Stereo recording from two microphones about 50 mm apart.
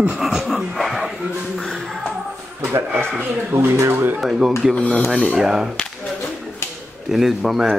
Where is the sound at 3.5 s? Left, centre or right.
Right.